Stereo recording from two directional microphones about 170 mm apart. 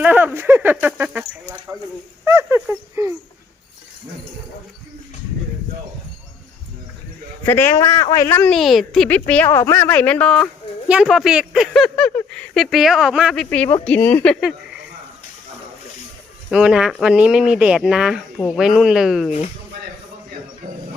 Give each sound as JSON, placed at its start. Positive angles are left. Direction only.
{"t": 0.0, "sound": "speech", "side_deg": -10}
{"t": 2.2, "sound": "a sound", "side_deg": -15}
{"t": 7.4, "sound": "a woman's voice", "side_deg": 15}
{"t": 8.5, "sound": "a woman's voice", "side_deg": 0}
{"t": 10.8, "sound": "a woman's voice", "side_deg": -5}
{"t": 16.5, "sound": "speech", "side_deg": -5}